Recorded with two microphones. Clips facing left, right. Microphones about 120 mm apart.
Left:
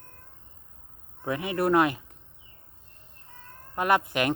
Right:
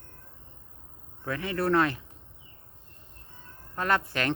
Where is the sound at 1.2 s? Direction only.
20° left (ahead or behind).